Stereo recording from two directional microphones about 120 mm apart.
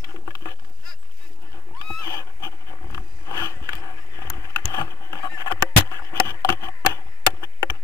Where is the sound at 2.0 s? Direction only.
30° left (ahead or behind).